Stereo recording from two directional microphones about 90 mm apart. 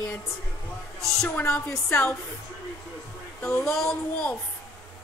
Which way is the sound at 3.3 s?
15° left (ahead or behind).